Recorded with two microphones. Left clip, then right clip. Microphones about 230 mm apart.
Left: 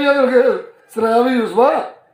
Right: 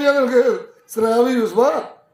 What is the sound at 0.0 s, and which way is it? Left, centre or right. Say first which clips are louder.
A man's voice: left 2 dB; right.